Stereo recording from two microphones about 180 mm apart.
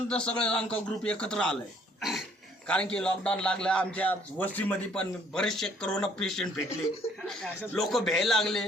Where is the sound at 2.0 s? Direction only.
Centre (ahead or behind).